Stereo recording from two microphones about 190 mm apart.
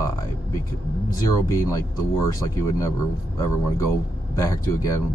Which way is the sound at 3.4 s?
15° left (ahead or behind).